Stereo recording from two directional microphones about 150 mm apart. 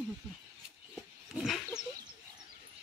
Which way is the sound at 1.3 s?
Centre (ahead or behind).